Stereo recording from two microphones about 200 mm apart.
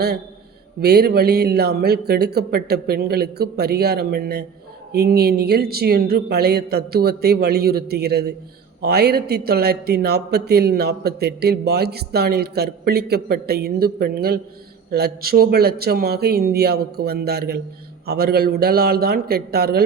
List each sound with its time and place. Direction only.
0.8 s a man's voice: 50° right (ahead or behind)